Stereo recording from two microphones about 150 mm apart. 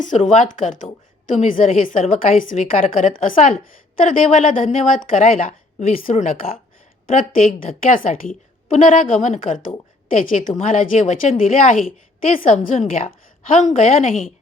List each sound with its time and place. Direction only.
0.4 s a woman's voice: 60° left (ahead or behind)